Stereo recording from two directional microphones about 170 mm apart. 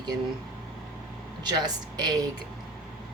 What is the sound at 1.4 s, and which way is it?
Speech, 25° right (ahead or behind).